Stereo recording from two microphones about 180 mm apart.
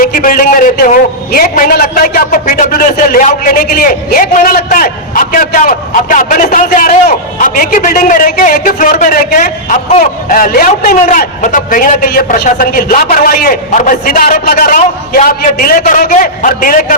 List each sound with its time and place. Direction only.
0.0 s a man's voice: 50° left (ahead or behind)